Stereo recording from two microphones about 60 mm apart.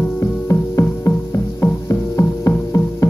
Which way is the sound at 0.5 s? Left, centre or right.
Left.